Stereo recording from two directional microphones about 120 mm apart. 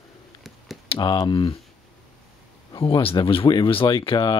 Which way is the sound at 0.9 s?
45° left (ahead or behind).